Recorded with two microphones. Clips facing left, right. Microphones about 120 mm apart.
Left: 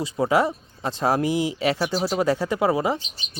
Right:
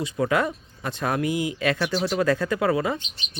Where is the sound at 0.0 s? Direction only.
25° left (ahead or behind).